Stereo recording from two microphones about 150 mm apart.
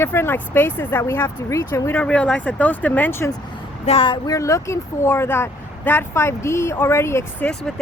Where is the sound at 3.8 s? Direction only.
40° left (ahead or behind).